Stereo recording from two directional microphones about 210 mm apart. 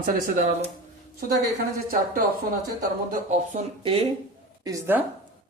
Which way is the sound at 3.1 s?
35° right (ahead or behind).